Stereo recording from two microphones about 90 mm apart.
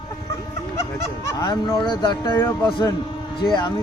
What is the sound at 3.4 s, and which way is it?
Speech, 55° left (ahead or behind).